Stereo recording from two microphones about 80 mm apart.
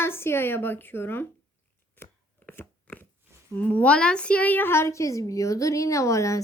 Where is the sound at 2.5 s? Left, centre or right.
Left.